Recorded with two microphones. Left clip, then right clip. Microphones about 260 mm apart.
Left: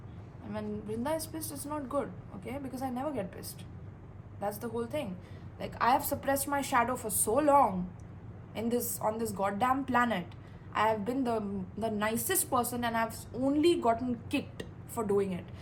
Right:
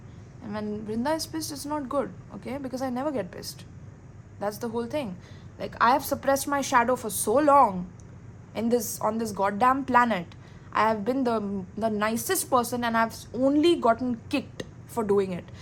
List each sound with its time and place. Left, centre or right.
0.4 s a woman's voice: right
1.4 s a woman's voice: centre
1.6 s a woman's voice: right
4.6 s a woman's voice: right